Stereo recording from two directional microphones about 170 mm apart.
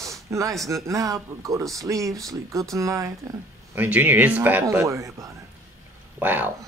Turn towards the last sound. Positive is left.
turn(degrees=-10)  # may be behind; listen again after turning